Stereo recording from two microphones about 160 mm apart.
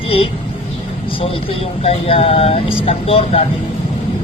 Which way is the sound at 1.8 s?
35° left (ahead or behind).